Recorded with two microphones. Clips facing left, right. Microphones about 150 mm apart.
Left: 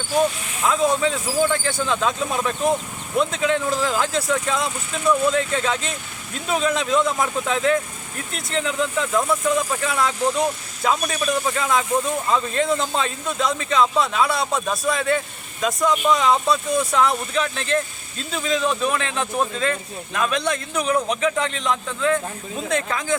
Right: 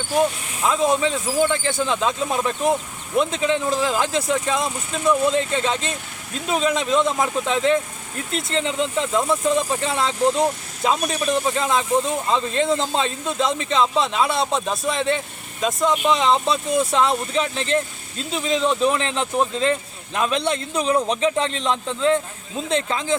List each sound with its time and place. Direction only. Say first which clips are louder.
0.7 s speech: even; 25° right (ahead or behind)